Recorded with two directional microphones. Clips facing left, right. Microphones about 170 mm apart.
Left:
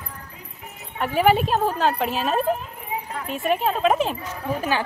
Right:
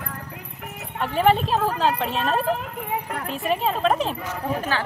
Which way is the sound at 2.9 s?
65° right (ahead or behind).